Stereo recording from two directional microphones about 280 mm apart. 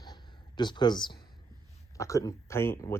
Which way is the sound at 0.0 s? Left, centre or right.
Centre.